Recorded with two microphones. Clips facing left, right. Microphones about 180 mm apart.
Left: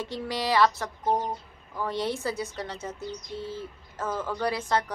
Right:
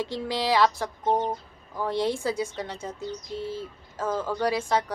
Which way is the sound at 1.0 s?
25° right (ahead or behind).